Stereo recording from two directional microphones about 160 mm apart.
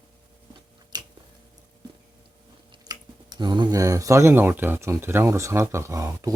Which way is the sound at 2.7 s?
25° right (ahead or behind).